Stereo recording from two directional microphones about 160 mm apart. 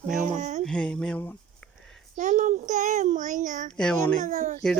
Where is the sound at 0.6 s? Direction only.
5° left (ahead or behind).